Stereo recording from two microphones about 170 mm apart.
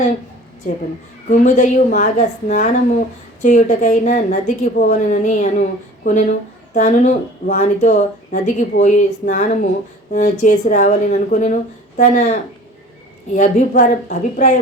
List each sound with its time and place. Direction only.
1.3 s a woman's voice: 45° left (ahead or behind)
6.7 s a woman's voice: 45° left (ahead or behind)